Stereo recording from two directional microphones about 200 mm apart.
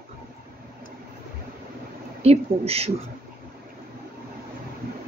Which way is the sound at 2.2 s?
30° right (ahead or behind).